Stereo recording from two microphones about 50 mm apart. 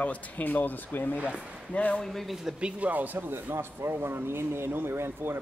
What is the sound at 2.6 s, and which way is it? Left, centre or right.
Speech, right.